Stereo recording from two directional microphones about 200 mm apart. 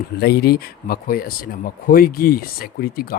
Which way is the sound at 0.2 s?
55° left (ahead or behind).